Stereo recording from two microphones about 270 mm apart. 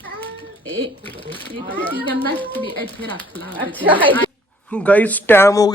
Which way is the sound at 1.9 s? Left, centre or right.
Centre.